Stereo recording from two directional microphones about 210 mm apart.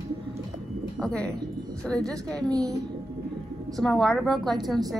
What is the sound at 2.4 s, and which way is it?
Speech, 15° right (ahead or behind).